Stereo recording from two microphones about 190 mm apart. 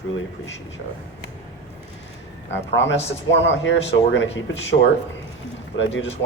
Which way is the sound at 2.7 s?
75° left (ahead or behind).